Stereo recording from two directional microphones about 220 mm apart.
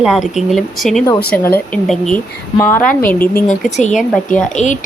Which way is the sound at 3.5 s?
30° left (ahead or behind).